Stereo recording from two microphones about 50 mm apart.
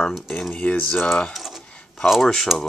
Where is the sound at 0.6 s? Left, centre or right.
Left.